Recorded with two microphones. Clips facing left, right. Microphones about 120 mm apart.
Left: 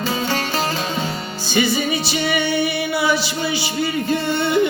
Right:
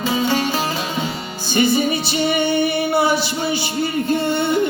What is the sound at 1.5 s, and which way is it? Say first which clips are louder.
Music: right 3 dB; 50° right (ahead or behind).